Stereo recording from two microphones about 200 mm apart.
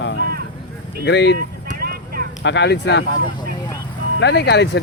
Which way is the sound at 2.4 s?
60° left (ahead or behind).